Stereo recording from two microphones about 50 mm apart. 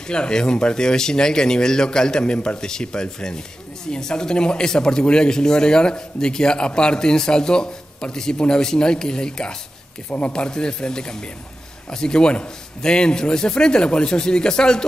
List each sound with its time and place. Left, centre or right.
0.1 s a man's voice: centre